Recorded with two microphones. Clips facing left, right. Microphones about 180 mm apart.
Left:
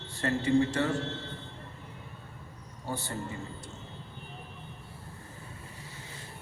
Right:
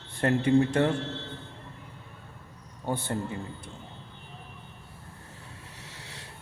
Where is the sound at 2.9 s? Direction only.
55° right (ahead or behind).